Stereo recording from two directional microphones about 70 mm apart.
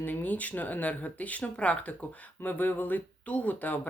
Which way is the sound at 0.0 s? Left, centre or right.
Left.